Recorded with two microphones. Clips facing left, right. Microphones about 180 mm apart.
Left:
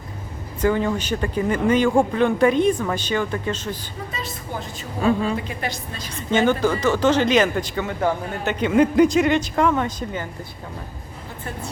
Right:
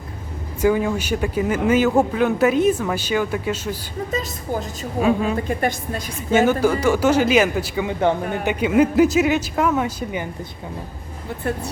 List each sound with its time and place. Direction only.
0.6 s speech: 10° right (ahead or behind)
4.9 s speech: 10° right (ahead or behind)
5.5 s a woman's voice: 50° right (ahead or behind)
6.1 s speech: 10° right (ahead or behind)